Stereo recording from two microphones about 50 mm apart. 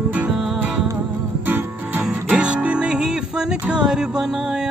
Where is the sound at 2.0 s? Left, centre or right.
Centre.